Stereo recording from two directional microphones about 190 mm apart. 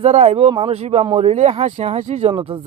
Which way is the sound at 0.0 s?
35° right (ahead or behind).